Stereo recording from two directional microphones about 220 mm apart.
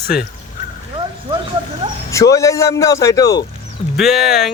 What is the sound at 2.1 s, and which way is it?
A man's voice, 15° left (ahead or behind).